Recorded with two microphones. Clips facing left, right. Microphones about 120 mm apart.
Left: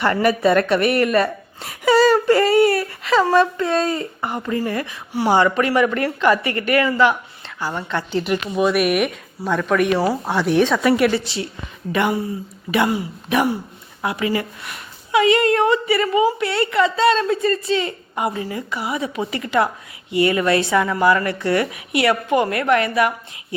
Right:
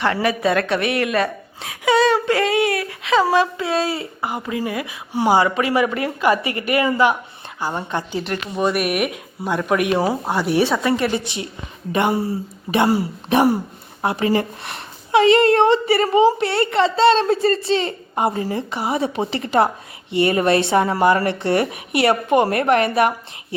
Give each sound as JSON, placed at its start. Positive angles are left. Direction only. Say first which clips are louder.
{"t": 0.0, "sound": "a woman's voice", "louder": "left 2 dB", "side_deg": 0}
{"t": 8.2, "sound": "a woman's voice", "louder": "left 3 dB", "side_deg": 5}
{"t": 9.4, "sound": "speech", "louder": "left 1 dB", "side_deg": -15}
{"t": 9.9, "sound": "a woman's voice", "louder": "even", "side_deg": -20}
{"t": 10.2, "sound": "a woman's voice", "louder": "left 1 dB", "side_deg": -5}
{"t": 11.3, "sound": "a woman's voice", "louder": "left 2 dB", "side_deg": -20}